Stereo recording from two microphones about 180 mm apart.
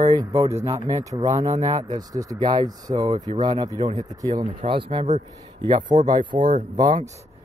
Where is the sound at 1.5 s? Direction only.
40° right (ahead or behind).